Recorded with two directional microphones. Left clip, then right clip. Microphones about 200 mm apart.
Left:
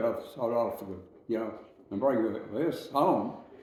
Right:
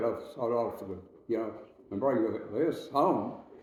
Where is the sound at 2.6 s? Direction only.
5° left (ahead or behind).